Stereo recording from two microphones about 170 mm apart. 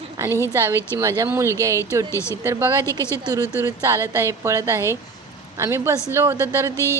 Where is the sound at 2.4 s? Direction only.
15° right (ahead or behind).